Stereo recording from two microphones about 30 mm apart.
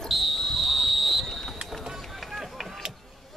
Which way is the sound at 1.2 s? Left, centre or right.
Centre.